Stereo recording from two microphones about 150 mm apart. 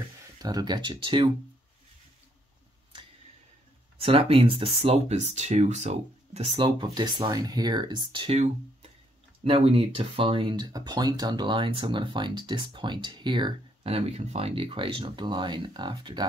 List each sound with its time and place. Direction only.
0.4 s speech: 25° right (ahead or behind)
4.0 s speech: 40° right (ahead or behind)
6.8 s speech: 30° right (ahead or behind)